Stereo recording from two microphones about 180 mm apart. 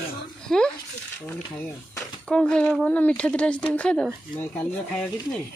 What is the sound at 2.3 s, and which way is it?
Speech, 5° left (ahead or behind).